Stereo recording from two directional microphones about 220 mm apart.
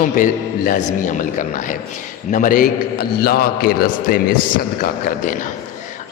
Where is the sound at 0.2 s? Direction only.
40° left (ahead or behind).